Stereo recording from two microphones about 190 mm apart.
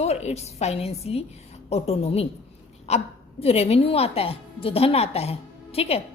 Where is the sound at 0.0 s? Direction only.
35° left (ahead or behind).